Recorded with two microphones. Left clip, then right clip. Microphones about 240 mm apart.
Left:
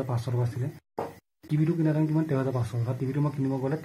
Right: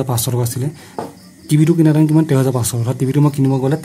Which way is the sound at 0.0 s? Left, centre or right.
Right.